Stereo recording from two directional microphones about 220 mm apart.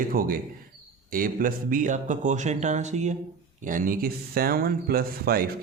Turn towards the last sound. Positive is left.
turn(degrees=-45)  # may be behind; listen again after turning